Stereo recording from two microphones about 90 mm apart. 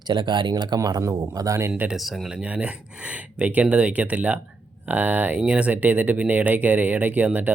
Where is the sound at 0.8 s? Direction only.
40° right (ahead or behind).